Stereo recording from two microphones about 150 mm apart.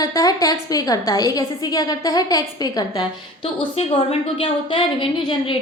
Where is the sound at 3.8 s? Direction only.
45° left (ahead or behind).